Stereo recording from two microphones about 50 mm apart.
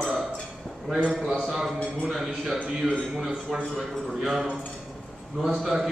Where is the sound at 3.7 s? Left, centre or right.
Centre.